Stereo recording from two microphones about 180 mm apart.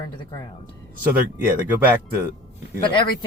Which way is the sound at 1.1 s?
10° right (ahead or behind).